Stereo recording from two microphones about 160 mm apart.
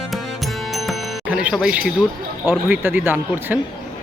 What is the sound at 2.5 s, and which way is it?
Speech, 10° right (ahead or behind).